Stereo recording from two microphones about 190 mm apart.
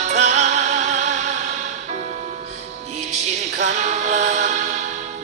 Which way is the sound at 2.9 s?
40° right (ahead or behind).